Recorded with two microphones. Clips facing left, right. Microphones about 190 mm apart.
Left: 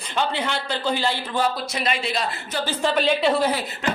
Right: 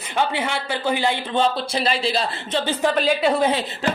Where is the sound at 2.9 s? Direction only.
5° right (ahead or behind).